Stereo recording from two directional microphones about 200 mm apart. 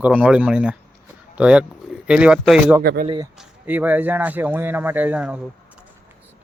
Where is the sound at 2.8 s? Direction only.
50° right (ahead or behind).